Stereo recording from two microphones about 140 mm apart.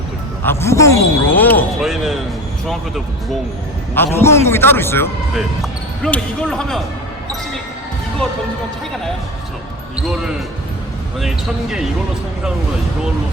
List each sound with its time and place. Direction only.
0.4 s speech: 20° left (ahead or behind)
1.8 s speech: centre (ahead or behind)
3.9 s a man's voice: 15° left (ahead or behind)
5.3 s basketball bounce: centre (ahead or behind)
6.1 s speech: 5° left (ahead or behind)
9.9 s speech: 5° right (ahead or behind)